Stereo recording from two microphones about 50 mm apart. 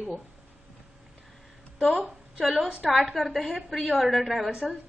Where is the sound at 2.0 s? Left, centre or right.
Right.